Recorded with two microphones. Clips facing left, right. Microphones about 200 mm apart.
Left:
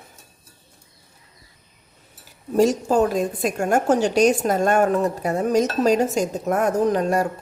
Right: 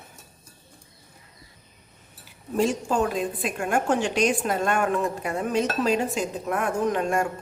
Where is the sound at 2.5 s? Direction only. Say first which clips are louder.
Left 6 dB; 40° left (ahead or behind).